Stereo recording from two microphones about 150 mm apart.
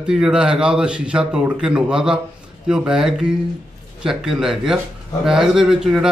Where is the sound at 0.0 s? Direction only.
5° right (ahead or behind).